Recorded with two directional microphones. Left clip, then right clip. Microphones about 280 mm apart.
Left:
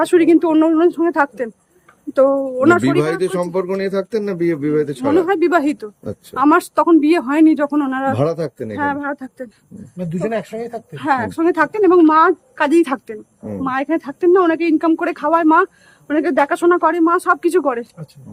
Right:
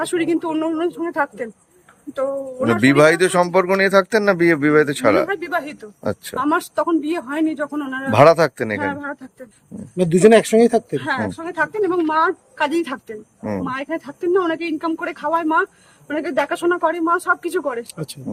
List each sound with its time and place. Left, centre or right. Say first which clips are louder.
0.0 s speech: left 8 dB; centre
2.8 s speech: right 4 dB; centre
5.2 s speech: left 7 dB; centre
8.1 s speech: right 8 dB; centre
8.8 s speech: left 4 dB; centre
11.0 s speech: left 7 dB; centre